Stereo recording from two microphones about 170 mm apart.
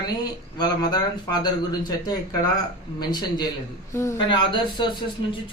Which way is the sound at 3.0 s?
25° left (ahead or behind).